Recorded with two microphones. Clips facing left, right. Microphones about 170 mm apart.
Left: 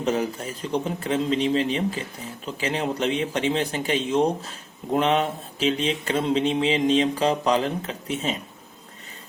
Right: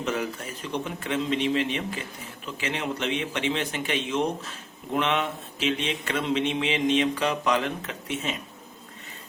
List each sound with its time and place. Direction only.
0.0 s mantra: 35° left (ahead or behind)